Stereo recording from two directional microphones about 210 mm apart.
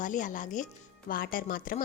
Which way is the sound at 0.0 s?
40° left (ahead or behind).